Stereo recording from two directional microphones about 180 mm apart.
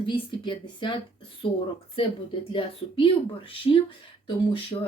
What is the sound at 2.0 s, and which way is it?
Speech, 30° left (ahead or behind).